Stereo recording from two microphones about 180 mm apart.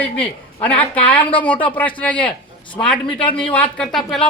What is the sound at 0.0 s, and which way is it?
Speech, 10° left (ahead or behind).